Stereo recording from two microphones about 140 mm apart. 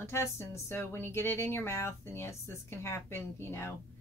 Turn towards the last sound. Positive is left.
turn(degrees=15)  # may be behind; listen again after turning